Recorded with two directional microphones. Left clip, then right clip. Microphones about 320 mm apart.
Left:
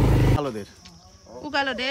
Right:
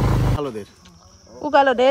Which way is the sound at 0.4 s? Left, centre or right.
Centre.